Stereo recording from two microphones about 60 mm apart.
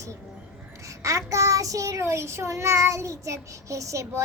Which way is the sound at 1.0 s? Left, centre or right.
Right.